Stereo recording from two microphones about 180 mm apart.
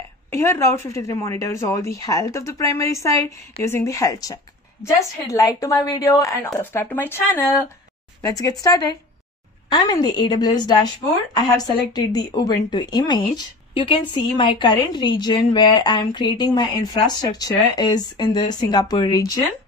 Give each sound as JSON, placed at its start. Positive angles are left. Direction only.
{"t": 0.3, "sound": "a woman's voice", "side_deg": 15}